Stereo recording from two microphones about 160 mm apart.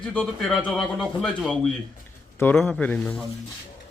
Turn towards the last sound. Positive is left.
turn(degrees=5)  # may be behind; listen again after turning